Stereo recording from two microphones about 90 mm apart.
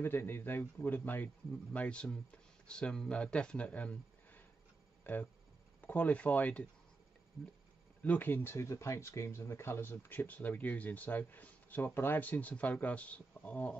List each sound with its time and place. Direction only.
0.0 s a man's voice: 25° left (ahead or behind)
8.0 s speech: 20° left (ahead or behind)